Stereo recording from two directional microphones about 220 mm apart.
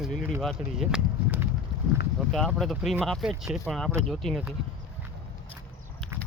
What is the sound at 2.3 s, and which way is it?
Speech, centre (ahead or behind).